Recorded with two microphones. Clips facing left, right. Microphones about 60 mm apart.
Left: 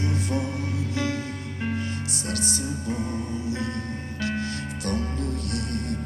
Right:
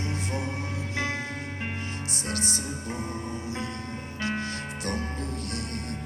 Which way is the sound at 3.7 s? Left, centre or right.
Left.